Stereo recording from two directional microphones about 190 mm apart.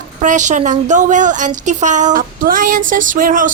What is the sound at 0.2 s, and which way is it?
A woman's voice, 40° right (ahead or behind).